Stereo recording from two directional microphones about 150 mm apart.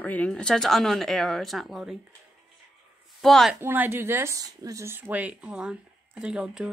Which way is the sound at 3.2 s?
Centre (ahead or behind).